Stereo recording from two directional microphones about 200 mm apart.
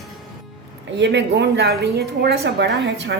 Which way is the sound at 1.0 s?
60° right (ahead or behind).